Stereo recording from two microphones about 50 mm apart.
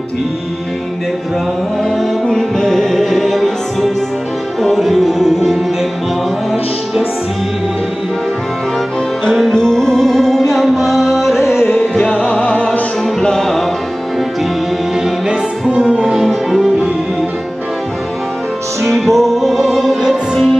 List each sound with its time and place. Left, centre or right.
2.2 s music: centre
9.2 s music: centre
12.0 s music: left
13.2 s music: centre
15.0 s music: centre
15.8 s music: centre
16.2 s music: centre
18.9 s music: centre